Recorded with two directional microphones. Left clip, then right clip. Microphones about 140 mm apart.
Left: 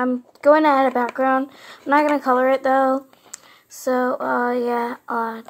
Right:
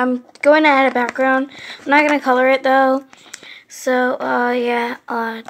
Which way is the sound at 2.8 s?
Centre (ahead or behind).